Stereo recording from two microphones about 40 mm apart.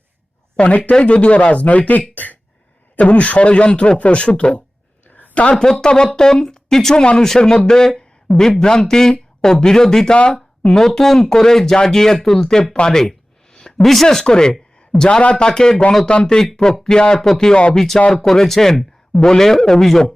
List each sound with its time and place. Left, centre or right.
0.5 s speech: left
5.1 s a sound: left
5.5 s speech: centre
6.9 s speech: left
12.9 s a sound: centre
13.8 s speech: centre
17.5 s speech: left
17.7 s speech: centre